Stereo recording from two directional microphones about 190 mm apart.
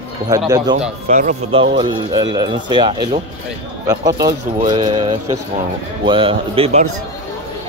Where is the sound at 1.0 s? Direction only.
40° right (ahead or behind).